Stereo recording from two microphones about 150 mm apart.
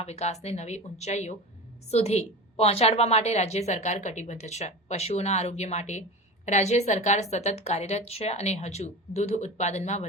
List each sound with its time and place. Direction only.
0.0 s a woman's voice: 45° left (ahead or behind)